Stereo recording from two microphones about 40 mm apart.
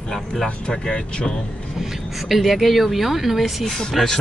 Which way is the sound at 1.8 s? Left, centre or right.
Centre.